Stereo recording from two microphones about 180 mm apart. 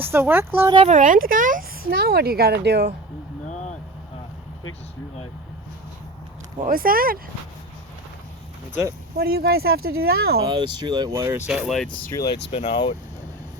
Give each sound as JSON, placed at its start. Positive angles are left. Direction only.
{"t": 0.0, "sound": "speech", "side_deg": -10}
{"t": 0.9, "sound": "speech", "side_deg": -45}
{"t": 3.5, "sound": "vehicle", "side_deg": 40}
{"t": 6.7, "sound": "speech", "side_deg": -55}
{"t": 9.1, "sound": "speech", "side_deg": -60}
{"t": 10.4, "sound": "speech", "side_deg": -25}
{"t": 11.9, "sound": "speech", "side_deg": 20}